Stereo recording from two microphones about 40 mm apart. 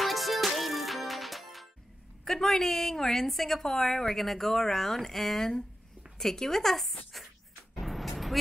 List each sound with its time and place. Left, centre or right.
0.0 s music: centre
2.2 s a woman's voice: centre
7.8 s vehicle: centre